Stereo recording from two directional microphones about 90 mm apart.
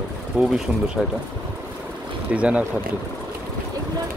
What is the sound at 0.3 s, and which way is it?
Speech, 15° right (ahead or behind).